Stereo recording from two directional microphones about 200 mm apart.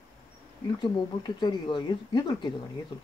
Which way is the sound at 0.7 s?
20° left (ahead or behind).